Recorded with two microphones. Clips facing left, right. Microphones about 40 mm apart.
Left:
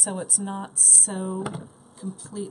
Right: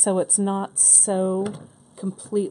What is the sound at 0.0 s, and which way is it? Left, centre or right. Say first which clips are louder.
Speech: right 9 dB; right.